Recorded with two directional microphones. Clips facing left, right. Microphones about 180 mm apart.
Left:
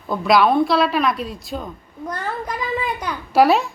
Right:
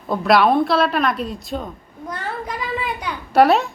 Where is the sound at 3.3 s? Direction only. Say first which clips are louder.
Right 1 dB; centre (ahead or behind).